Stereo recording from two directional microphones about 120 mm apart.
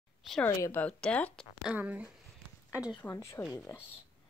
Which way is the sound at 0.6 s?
15° left (ahead or behind).